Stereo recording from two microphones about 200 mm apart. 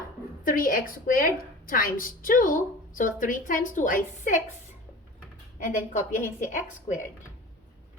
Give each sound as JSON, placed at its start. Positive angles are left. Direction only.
{"t": 0.4, "sound": "a woman's voice", "side_deg": 45}
{"t": 5.9, "sound": "a woman's voice", "side_deg": 40}